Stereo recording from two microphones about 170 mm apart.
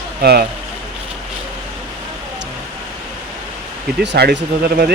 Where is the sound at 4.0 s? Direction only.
80° right.